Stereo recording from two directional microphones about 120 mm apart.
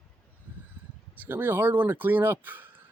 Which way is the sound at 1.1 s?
15° right (ahead or behind).